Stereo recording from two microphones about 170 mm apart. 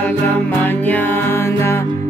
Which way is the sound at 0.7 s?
10° left (ahead or behind).